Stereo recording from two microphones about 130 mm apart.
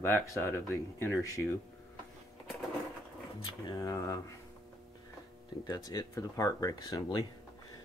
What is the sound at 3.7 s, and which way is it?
Speech, 25° left (ahead or behind).